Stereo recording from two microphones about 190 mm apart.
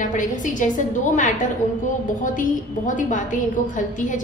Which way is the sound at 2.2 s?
45° left (ahead or behind).